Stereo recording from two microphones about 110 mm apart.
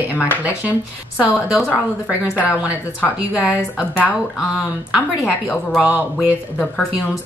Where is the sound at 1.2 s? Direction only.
15° right (ahead or behind).